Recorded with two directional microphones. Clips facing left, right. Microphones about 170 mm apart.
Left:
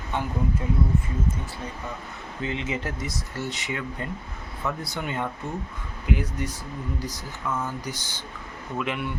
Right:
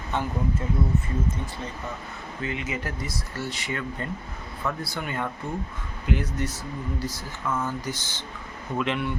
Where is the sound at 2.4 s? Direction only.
25° left (ahead or behind).